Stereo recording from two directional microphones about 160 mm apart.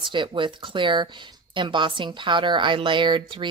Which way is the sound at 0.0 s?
30° right (ahead or behind).